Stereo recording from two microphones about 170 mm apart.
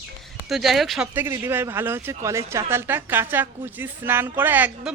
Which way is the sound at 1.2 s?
15° right (ahead or behind).